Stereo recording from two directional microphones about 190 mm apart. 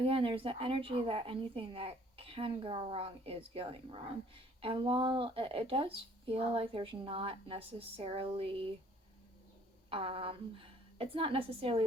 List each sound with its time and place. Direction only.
0.0 s a woman's voice: 30° right (ahead or behind)
9.9 s a woman's voice: 30° right (ahead or behind)